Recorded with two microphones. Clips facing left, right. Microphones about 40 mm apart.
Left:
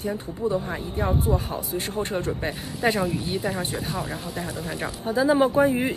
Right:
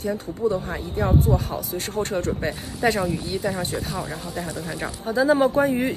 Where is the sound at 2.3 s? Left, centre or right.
Centre.